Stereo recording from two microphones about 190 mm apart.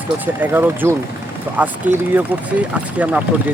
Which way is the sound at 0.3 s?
10° right (ahead or behind).